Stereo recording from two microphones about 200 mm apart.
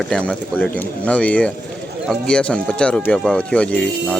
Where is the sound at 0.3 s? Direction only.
5° left (ahead or behind).